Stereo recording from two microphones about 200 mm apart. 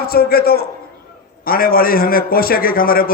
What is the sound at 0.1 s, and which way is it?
A man's voice, 50° left (ahead or behind).